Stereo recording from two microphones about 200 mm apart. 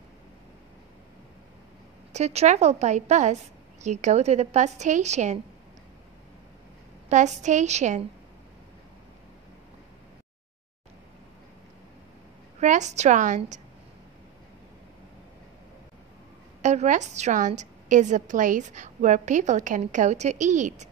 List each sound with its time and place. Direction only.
2.1 s a woman's voice: 35° right (ahead or behind)
7.1 s a woman's voice: 35° right (ahead or behind)
12.5 s a woman's voice: 35° right (ahead or behind)
16.6 s a woman's voice: 35° right (ahead or behind)